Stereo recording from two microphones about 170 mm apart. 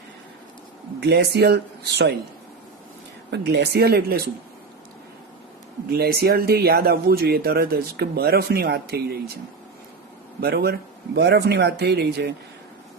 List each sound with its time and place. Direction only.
0.9 s speech: 75° right (ahead or behind)
3.2 s speech: 75° right (ahead or behind)
5.9 s speech: 65° right (ahead or behind)
10.4 s speech: 70° right (ahead or behind)